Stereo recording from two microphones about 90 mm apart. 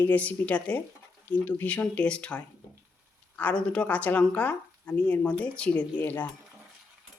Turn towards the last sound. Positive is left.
turn(degrees=20)  # may be behind; listen again after turning